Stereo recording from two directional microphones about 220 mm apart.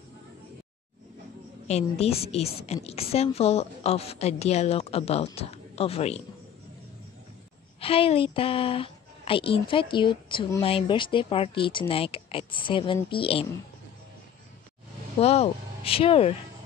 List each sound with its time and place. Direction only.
1.7 s a woman's voice: 30° left (ahead or behind)
7.8 s a woman's voice: 25° left (ahead or behind)
15.1 s a woman's voice: 30° left (ahead or behind)